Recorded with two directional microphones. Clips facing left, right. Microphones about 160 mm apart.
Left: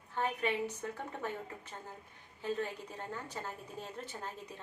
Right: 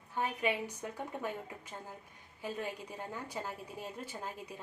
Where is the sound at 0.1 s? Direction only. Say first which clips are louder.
Even; 10° right (ahead or behind).